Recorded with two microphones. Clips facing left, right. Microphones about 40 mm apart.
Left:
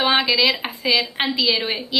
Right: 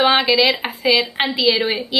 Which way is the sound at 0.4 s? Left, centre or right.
Centre.